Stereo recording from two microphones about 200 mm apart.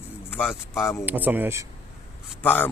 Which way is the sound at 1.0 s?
10° right (ahead or behind).